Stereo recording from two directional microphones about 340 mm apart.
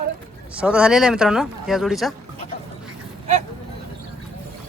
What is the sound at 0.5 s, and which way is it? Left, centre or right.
Speech, centre.